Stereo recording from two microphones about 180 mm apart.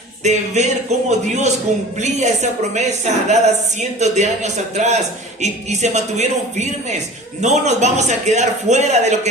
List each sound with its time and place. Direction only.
0.3 s a woman's voice: 40° right (ahead or behind)
2.0 s a woman's voice: 40° right (ahead or behind)